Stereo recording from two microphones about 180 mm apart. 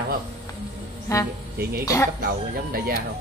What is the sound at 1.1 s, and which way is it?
Speech, 15° left (ahead or behind).